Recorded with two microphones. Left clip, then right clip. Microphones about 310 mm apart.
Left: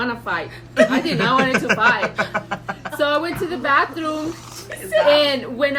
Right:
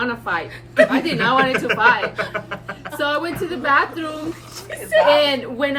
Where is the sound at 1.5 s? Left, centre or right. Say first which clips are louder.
Right 1 dB; centre.